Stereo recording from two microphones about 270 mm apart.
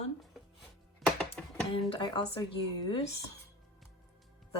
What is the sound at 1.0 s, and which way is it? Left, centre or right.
Music, centre.